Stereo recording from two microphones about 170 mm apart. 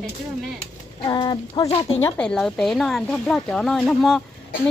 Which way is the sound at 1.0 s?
25° left (ahead or behind).